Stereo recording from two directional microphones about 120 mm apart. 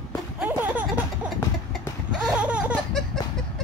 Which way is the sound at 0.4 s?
15° right (ahead or behind).